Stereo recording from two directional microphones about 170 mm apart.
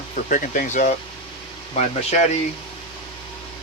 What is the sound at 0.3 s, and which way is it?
Speech, 50° left (ahead or behind).